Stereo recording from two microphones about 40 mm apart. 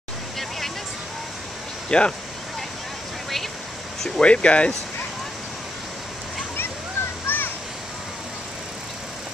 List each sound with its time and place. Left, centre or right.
1.9 s speech: left
4.2 s speech: left
7.3 s a sound: left